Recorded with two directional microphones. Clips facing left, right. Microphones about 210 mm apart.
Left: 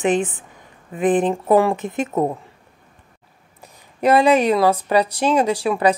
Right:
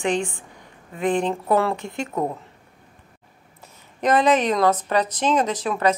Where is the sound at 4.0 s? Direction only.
10° left (ahead or behind).